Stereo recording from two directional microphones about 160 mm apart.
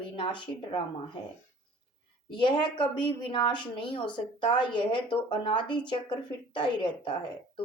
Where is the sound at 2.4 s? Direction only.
30° left (ahead or behind).